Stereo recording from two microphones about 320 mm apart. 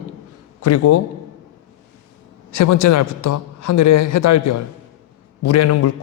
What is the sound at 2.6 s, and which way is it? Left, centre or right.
A man's voice, left.